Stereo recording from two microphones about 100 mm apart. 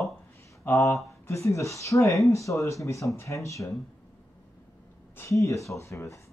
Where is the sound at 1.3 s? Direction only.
30° left (ahead or behind).